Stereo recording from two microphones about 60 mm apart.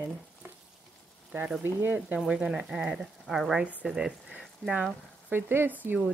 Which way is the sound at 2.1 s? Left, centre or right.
Centre.